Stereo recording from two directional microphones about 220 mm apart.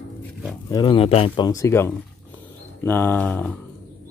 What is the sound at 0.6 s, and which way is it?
Speech, 20° left (ahead or behind).